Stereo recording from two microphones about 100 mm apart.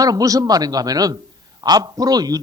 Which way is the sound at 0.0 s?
35° right (ahead or behind).